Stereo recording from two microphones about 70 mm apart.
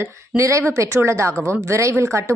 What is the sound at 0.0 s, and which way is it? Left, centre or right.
A woman's voice, right.